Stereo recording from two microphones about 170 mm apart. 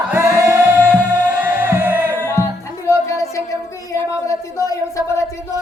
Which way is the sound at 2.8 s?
20° left (ahead or behind).